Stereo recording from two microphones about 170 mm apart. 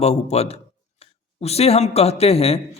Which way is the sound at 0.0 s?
40° left (ahead or behind).